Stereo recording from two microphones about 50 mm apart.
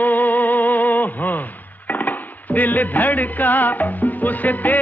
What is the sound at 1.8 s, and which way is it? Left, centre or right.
Music, left.